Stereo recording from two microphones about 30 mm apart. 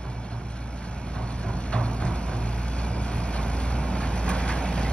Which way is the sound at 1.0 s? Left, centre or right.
Left.